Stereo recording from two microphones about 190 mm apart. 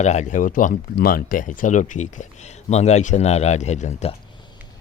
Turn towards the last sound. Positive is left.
turn(degrees=35)  # may be behind; listen again after turning